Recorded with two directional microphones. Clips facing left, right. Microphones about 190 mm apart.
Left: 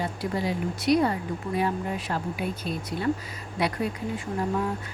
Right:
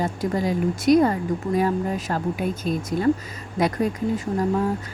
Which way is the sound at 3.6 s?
45° right (ahead or behind).